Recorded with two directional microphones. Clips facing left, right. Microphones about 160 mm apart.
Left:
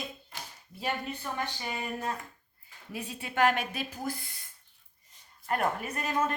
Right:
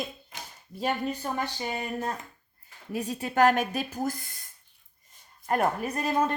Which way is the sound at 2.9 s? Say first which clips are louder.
Right 7 dB; 40° right (ahead or behind).